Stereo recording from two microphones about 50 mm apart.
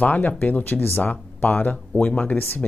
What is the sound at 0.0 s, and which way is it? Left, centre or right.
Speech, left.